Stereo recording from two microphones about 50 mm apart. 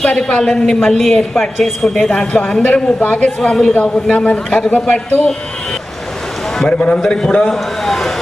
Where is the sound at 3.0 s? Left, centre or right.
Left.